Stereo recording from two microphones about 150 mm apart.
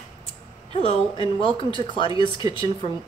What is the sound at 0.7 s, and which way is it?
Speech, 35° left (ahead or behind).